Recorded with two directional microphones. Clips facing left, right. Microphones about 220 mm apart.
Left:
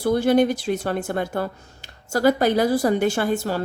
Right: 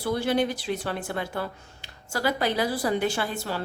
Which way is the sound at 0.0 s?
45° left (ahead or behind).